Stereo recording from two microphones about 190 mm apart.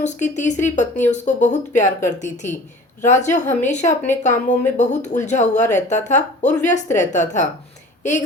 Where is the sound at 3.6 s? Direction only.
40° left (ahead or behind).